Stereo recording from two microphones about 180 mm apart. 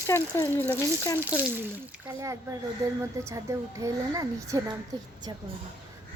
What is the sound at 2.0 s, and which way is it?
A woman's voice, 15° right (ahead or behind).